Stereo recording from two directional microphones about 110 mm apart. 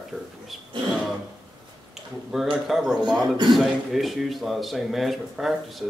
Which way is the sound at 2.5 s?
5° right (ahead or behind).